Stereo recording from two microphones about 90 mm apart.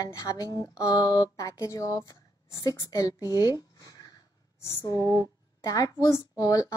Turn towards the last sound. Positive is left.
turn(degrees=40)  # may be behind; listen again after turning